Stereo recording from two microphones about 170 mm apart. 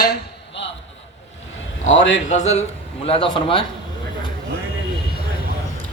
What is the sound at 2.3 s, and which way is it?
Speech, 45° left (ahead or behind).